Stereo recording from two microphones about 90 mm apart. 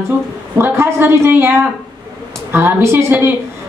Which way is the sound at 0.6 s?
25° right (ahead or behind).